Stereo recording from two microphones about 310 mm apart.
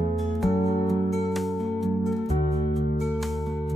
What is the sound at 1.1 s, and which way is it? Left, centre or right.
Music, centre.